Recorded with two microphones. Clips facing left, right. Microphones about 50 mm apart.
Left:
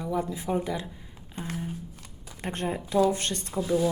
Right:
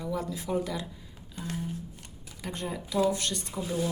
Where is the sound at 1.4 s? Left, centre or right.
Left.